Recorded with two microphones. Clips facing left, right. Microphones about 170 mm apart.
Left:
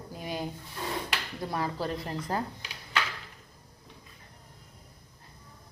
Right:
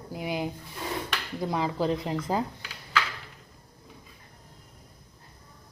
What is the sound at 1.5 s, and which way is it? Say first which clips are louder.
Speech: right 5 dB; 15° right (ahead or behind).